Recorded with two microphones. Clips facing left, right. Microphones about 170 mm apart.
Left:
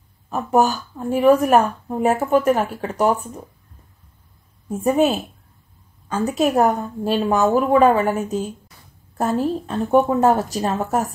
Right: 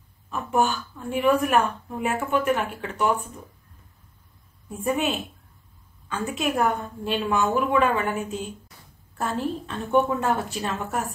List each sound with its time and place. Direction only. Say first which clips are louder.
0.3 s a woman's voice: left 6 dB; 40° left (ahead or behind)
4.6 s a woman's voice: left 8 dB; 40° left (ahead or behind)